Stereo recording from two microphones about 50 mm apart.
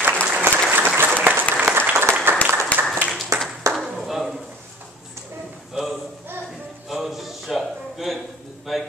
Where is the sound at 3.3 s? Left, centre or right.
Right.